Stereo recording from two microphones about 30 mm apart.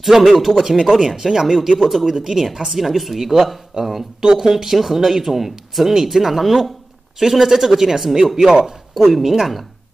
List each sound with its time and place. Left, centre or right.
0.0 s a woman's voice: centre
3.7 s speech: right
4.4 s speech: centre
8.9 s a woman's voice: centre